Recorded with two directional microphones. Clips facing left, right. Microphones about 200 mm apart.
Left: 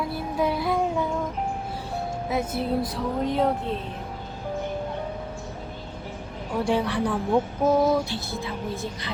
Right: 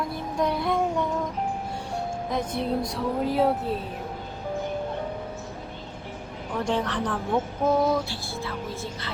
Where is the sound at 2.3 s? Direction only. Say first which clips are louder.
Left 2 dB; 5° left (ahead or behind).